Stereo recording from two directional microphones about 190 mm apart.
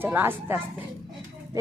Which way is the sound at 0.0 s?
10° right (ahead or behind).